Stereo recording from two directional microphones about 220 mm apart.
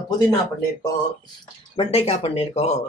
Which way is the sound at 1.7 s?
25° left (ahead or behind).